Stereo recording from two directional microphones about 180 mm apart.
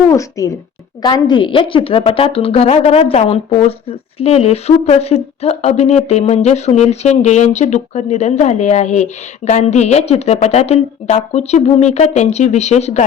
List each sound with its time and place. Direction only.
0.1 s a child's voice: 20° left (ahead or behind); by 13.1 s 40° left (ahead or behind)